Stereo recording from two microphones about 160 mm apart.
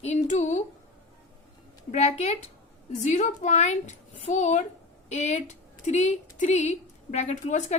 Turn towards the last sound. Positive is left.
turn(degrees=45)  # may be behind; listen again after turning